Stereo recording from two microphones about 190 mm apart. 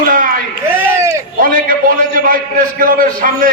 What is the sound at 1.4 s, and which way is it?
A man's voice, 50° right (ahead or behind).